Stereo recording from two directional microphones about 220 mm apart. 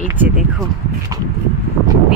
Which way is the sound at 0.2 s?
Centre (ahead or behind).